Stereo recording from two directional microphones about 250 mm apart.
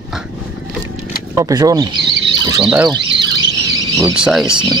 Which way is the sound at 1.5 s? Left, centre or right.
Centre.